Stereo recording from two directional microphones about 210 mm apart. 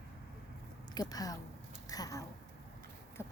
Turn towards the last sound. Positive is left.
turn(degrees=10)  # may be behind; listen again after turning